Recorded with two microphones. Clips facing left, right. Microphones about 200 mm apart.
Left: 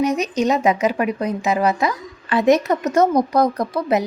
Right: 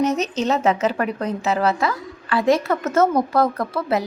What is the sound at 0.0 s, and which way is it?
A woman's voice, 10° left (ahead or behind).